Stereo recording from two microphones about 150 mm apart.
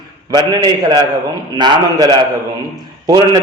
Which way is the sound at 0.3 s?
30° right (ahead or behind).